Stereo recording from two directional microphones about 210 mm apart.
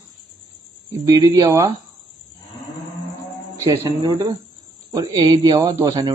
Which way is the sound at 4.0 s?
20° right (ahead or behind).